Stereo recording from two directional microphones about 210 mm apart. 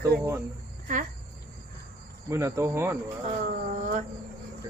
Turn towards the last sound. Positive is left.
turn(degrees=-35)  # may be behind; listen again after turning